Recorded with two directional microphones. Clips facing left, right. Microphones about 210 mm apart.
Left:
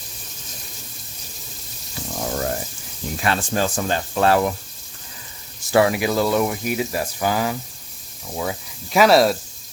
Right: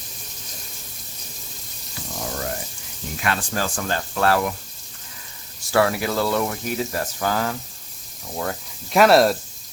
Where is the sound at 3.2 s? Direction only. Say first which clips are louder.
Left 3 dB; 20° left (ahead or behind).